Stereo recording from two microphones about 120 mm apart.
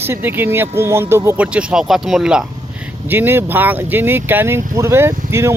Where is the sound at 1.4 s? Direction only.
10° right (ahead or behind).